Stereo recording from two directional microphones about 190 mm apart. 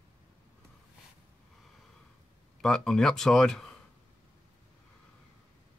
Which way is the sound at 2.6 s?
Centre (ahead or behind).